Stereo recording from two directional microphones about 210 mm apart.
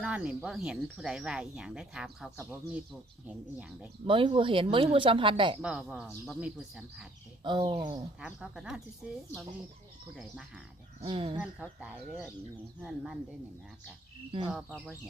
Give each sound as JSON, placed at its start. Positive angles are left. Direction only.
{"t": 0.0, "sound": "speech", "side_deg": -5}
{"t": 4.0, "sound": "speech", "side_deg": -25}
{"t": 5.6, "sound": "speech", "side_deg": -5}
{"t": 7.4, "sound": "speech", "side_deg": -25}
{"t": 8.2, "sound": "speech", "side_deg": -5}
{"t": 11.0, "sound": "speech", "side_deg": -25}
{"t": 11.3, "sound": "speech", "side_deg": -5}
{"t": 14.3, "sound": "speech", "side_deg": -25}